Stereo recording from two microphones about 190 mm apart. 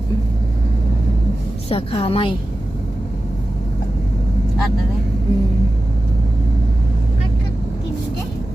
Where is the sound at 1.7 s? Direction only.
30° left (ahead or behind).